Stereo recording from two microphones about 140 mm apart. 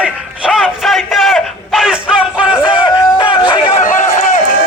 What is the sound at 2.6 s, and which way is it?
Music, 35° left (ahead or behind).